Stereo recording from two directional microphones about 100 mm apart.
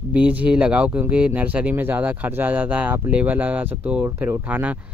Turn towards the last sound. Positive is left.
turn(degrees=-15)  # may be behind; listen again after turning